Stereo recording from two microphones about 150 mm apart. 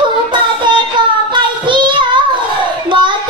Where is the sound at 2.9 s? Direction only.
30° right (ahead or behind).